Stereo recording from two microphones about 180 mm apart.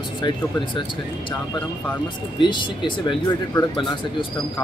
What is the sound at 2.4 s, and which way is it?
Speech, 25° left (ahead or behind).